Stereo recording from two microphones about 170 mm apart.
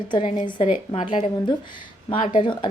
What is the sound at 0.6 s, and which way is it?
A woman's voice, 45° left (ahead or behind).